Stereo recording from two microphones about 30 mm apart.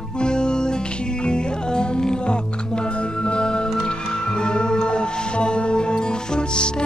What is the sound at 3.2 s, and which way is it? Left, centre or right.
Music, left.